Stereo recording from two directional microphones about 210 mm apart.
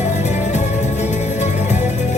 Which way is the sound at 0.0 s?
35° left (ahead or behind).